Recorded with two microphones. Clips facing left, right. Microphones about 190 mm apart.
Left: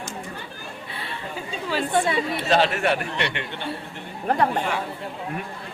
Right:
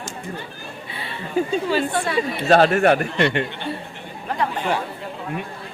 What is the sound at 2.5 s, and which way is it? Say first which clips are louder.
Speech: right 7 dB; 50° right (ahead or behind).